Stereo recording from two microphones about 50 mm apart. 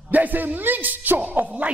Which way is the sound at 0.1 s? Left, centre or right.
Right.